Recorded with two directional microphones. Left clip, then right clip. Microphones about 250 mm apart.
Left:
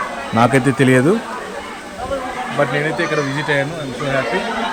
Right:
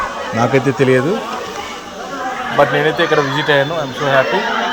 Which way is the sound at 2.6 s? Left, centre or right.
Centre.